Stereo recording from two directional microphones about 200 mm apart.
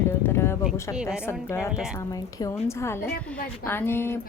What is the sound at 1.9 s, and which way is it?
Speech, 20° left (ahead or behind).